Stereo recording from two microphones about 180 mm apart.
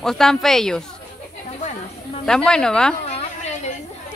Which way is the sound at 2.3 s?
5° left (ahead or behind).